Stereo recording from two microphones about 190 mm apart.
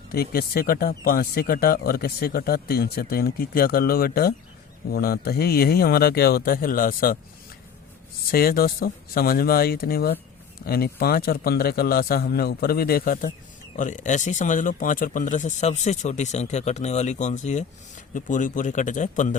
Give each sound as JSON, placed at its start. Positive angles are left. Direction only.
{"t": 0.1, "sound": "speech", "side_deg": 55}
{"t": 8.3, "sound": "speech", "side_deg": 50}